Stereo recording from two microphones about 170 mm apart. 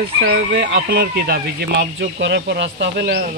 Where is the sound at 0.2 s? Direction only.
70° right (ahead or behind).